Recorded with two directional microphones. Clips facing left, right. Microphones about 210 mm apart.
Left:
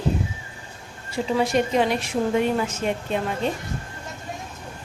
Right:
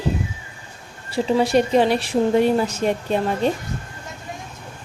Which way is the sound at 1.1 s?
35° right (ahead or behind).